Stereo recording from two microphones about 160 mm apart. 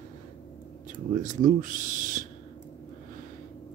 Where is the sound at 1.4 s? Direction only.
55° right (ahead or behind).